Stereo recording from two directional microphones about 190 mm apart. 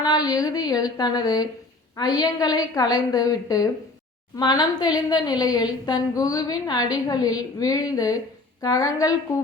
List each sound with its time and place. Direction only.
0.0 s a woman's voice: 20° left (ahead or behind)